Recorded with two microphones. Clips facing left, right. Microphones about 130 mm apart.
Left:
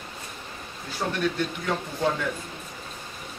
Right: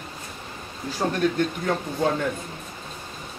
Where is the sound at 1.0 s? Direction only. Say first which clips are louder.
Right 4 dB; 40° right (ahead or behind).